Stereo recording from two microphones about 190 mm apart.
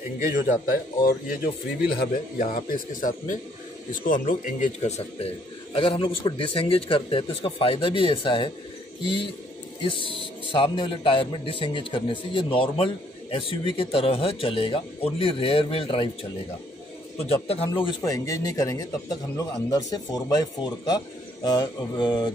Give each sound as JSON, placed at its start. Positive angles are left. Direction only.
{"t": 1.8, "sound": "speech", "side_deg": 45}
{"t": 17.3, "sound": "speech", "side_deg": 30}